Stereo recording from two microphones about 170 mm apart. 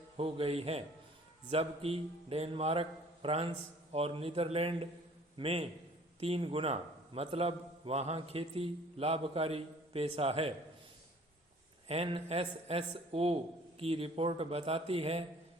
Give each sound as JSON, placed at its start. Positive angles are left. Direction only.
{"t": 0.2, "sound": "a man's voice", "side_deg": -35}
{"t": 11.9, "sound": "a man's voice", "side_deg": -35}